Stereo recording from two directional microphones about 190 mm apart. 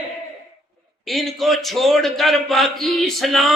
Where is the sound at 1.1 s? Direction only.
Centre (ahead or behind).